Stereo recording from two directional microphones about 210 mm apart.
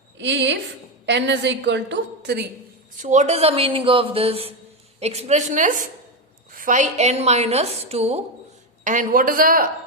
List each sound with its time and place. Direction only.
0.2 s a woman's voice: 55° right (ahead or behind)
3.0 s a woman's voice: 35° right (ahead or behind)